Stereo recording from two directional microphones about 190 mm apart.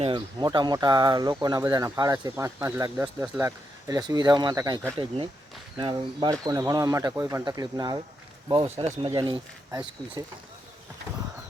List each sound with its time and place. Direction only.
0.0 s speech: 25° right (ahead or behind)